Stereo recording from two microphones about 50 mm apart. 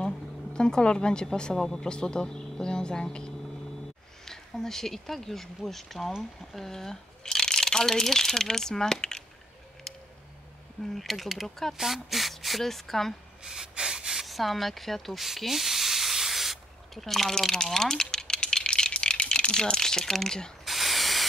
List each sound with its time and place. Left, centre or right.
0.0 s a woman's voice: centre
10.8 s speech: centre
11.7 s speech: centre
13.4 s rub: centre
14.2 s hiss: centre
20.6 s spray: centre